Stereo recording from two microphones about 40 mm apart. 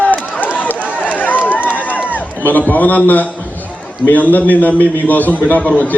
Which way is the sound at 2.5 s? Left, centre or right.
Left.